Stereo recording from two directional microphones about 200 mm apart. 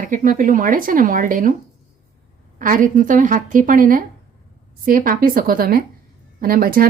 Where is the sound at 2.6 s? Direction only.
45° right (ahead or behind).